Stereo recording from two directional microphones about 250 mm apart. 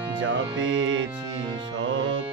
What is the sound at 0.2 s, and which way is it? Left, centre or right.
Music, right.